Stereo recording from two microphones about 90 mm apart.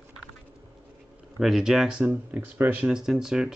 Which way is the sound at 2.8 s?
5° right (ahead or behind).